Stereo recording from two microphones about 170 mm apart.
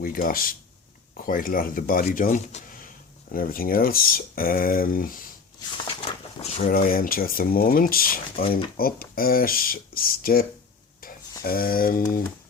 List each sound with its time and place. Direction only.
0.0 s speech: 55° left (ahead or behind)
3.3 s speech: 60° left (ahead or behind)
5.9 s a sound: 35° left (ahead or behind)
6.7 s speech: 55° left (ahead or behind)